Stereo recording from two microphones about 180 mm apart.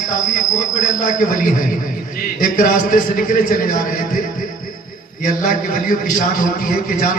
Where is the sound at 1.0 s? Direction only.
45° left (ahead or behind).